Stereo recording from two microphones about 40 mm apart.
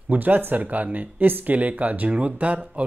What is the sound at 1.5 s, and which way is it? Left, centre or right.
Speech, right.